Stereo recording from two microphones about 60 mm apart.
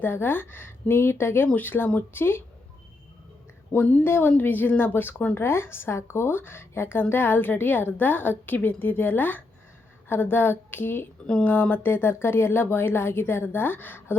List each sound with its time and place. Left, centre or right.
0.0 s speech: left
3.7 s a woman's voice: left
4.0 s a woman's voice: left